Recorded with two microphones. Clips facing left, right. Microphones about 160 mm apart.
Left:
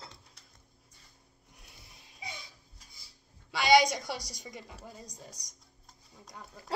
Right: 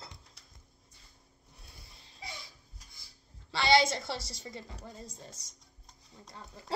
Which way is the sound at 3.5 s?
15° left (ahead or behind).